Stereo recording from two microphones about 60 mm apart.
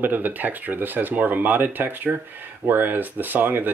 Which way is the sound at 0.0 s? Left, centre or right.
Right.